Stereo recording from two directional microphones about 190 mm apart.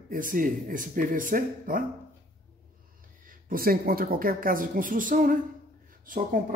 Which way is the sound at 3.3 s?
50° right (ahead or behind).